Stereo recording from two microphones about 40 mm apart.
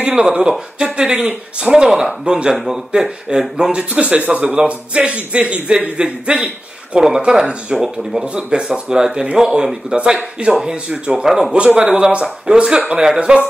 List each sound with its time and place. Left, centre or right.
0.1 s a man's voice: right
2.5 s speech: centre
2.9 s a man's voice: centre
3.9 s a man's voice: right; by 8.3 s centre
8.4 s a man's voice: right
11.2 s speech: centre
11.5 s a man's voice: right